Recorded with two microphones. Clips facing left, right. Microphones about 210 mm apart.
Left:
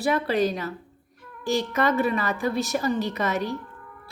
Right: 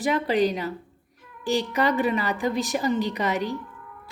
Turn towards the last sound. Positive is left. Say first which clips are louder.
# even
turn(degrees=-15)  # may be behind; listen again after turning